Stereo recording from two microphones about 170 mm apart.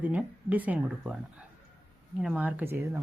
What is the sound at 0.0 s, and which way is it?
Speech, 10° right (ahead or behind).